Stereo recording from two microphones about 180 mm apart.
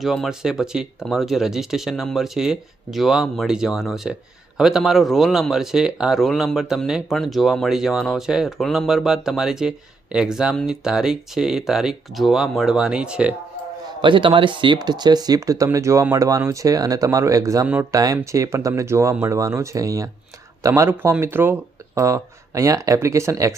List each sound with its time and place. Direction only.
0.0 s speech: centre (ahead or behind)
14.0 s speech: 25° right (ahead or behind)